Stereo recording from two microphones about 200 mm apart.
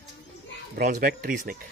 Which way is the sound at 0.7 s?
45° right (ahead or behind).